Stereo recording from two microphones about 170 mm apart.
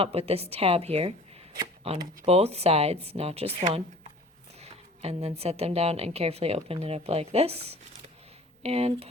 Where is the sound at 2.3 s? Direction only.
40° right (ahead or behind).